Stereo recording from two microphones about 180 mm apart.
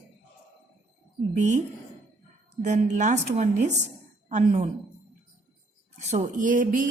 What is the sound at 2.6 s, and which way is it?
A woman's voice, 40° right (ahead or behind).